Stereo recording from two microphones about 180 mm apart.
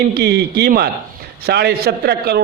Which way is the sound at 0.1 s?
65° right (ahead or behind).